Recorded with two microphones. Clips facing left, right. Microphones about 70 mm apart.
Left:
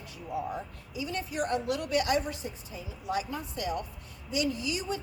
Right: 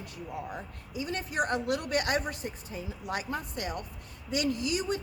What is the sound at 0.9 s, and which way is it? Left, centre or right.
Speech, right.